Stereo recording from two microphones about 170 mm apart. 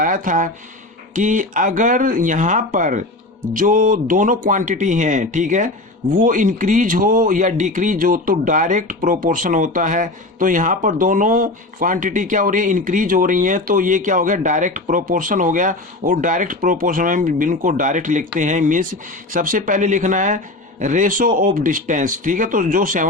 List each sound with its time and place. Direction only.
0.0 s a man's voice: 50° right (ahead or behind)